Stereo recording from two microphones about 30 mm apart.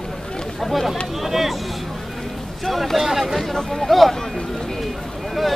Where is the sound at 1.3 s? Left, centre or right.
Centre.